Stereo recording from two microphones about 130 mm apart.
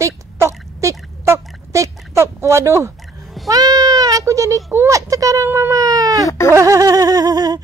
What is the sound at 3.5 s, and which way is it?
Speech, 30° right (ahead or behind).